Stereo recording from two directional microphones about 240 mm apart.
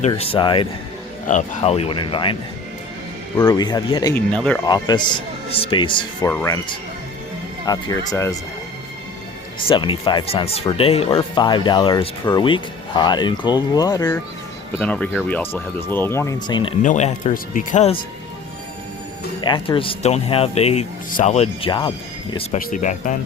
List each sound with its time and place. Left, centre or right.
0.1 s speech: left
1.3 s speech: left
3.3 s speech: centre
4.1 s speech: centre
4.6 s speech: centre
9.6 s speech: left
14.8 s speech: centre
16.8 s speech: left
19.4 s speech: centre
22.5 s speech: left